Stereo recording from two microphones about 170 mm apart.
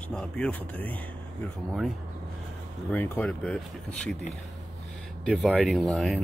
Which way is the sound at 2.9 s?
10° left (ahead or behind).